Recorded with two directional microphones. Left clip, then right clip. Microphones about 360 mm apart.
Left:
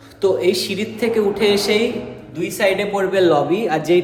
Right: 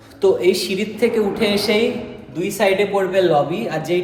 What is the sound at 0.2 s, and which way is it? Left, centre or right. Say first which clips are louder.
A man's voice: right 1 dB; centre.